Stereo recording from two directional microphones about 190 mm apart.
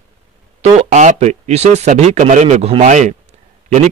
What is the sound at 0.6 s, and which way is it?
Speech, 35° right (ahead or behind).